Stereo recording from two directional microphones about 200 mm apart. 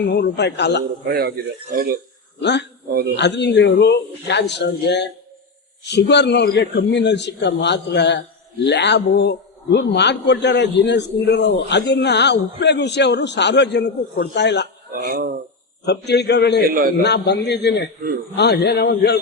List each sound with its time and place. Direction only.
0.0 s a man's voice: 55° left (ahead or behind)
1.0 s speech: 50° right (ahead or behind)
2.4 s a man's voice: 60° left (ahead or behind)
14.9 s speech: 45° right (ahead or behind)
15.9 s a man's voice: 55° left (ahead or behind)
16.6 s speech: 45° right (ahead or behind)
17.0 s a man's voice: 55° left (ahead or behind)